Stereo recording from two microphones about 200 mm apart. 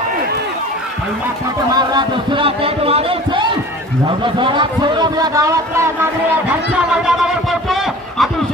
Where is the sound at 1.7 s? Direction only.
20° right (ahead or behind).